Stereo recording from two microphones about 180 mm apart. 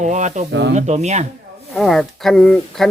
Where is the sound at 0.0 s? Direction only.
40° right (ahead or behind).